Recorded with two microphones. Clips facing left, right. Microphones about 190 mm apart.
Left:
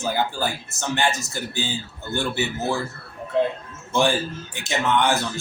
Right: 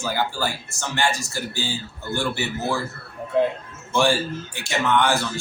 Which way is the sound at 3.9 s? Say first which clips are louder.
Right 1 dB; 20° left (ahead or behind).